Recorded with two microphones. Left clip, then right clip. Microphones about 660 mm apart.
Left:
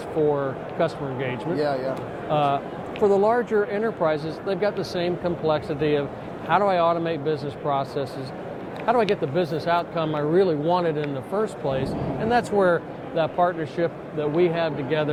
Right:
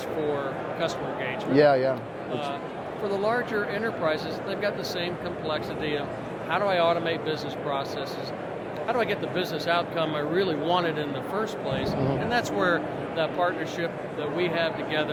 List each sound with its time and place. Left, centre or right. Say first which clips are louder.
1.5 s speech: right 7 dB; right
2.3 s a man's voice: left 10 dB; left
12.3 s speech: left 7 dB; left